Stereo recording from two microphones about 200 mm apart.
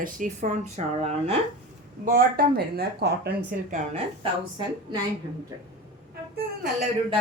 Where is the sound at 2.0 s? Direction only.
45° right (ahead or behind).